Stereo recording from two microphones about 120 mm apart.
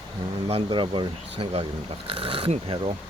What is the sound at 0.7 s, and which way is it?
Speech, 40° right (ahead or behind).